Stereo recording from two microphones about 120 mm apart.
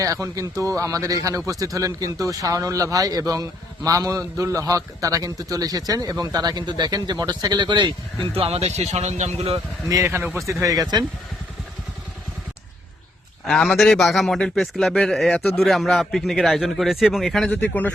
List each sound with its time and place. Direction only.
0.0 s a man's voice: 25° right (ahead or behind); by 9.3 s 70° right (ahead or behind)
9.9 s speech: 20° right (ahead or behind)
13.5 s a man's voice: 5° left (ahead or behind)